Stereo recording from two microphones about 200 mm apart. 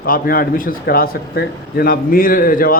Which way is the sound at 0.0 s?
45° left (ahead or behind).